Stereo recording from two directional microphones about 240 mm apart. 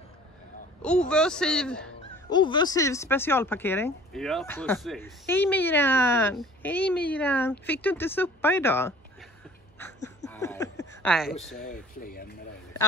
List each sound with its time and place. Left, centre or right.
0.8 s speech: centre
2.2 s speech: centre
10.0 s a sound: centre
11.5 s speech: left